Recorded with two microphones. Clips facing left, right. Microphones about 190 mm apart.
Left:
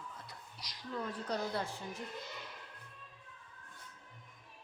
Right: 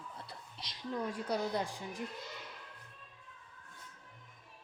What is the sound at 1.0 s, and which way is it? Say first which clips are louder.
A woman's voice: right 2 dB; 10° right (ahead or behind).